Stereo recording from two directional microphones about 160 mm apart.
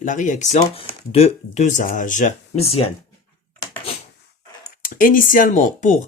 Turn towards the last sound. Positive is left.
turn(degrees=50)  # may be behind; listen again after turning